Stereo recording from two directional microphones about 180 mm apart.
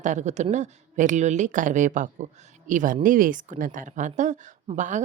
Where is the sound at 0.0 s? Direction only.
40° right (ahead or behind).